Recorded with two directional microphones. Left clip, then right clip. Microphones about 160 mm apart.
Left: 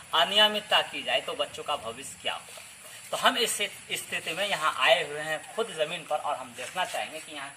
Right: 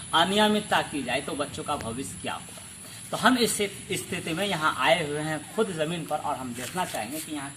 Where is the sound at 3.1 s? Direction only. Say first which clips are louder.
Right 2 dB; 10° left (ahead or behind).